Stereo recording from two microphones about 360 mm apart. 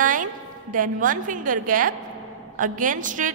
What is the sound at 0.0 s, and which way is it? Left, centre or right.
A woman's voice, right.